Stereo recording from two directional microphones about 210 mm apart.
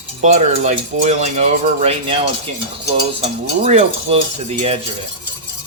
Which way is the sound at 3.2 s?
30° right (ahead or behind).